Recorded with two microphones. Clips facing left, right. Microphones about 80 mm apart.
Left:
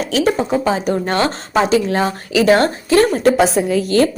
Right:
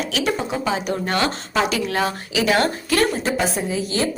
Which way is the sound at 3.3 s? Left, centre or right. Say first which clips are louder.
Left 8 dB; left.